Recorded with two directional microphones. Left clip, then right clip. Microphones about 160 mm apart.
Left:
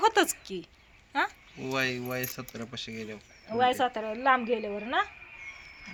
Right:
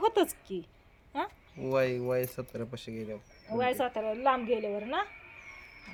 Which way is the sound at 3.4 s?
40° left (ahead or behind).